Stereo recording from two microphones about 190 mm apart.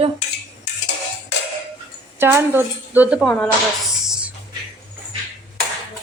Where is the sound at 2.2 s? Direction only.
10° right (ahead or behind).